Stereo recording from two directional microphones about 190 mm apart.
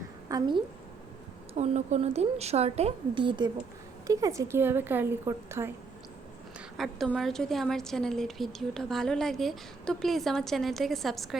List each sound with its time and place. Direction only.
0.3 s a woman's voice: 20° right (ahead or behind)
1.5 s a woman's voice: 35° right (ahead or behind); by 5.7 s 15° right (ahead or behind)
6.7 s a woman's voice: centre (ahead or behind)